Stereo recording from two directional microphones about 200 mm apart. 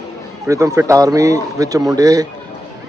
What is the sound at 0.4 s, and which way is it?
A man's voice, 15° right (ahead or behind).